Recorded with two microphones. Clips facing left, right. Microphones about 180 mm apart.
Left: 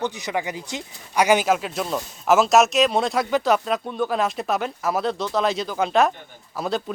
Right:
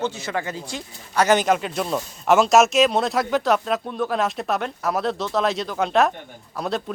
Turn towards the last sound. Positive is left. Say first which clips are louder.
# even
turn(degrees=0)  # may be behind; listen again after turning